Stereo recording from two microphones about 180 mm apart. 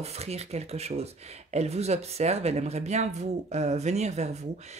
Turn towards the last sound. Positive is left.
turn(degrees=-40)  # may be behind; listen again after turning